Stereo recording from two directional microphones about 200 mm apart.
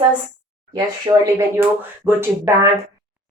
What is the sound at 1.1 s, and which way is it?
A woman's voice, 20° right (ahead or behind).